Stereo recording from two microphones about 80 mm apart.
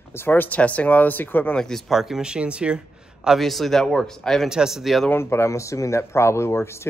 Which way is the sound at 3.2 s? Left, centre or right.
Centre.